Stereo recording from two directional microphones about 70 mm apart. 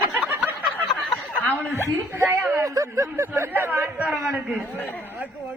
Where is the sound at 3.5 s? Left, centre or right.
Right.